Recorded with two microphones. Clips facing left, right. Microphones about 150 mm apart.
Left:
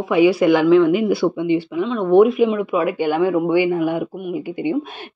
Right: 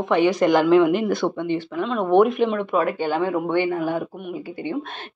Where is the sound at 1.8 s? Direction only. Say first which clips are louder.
Left 3 dB; centre (ahead or behind).